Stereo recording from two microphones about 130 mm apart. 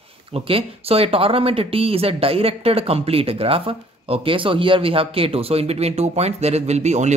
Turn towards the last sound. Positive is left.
turn(degrees=-60)  # may be behind; listen again after turning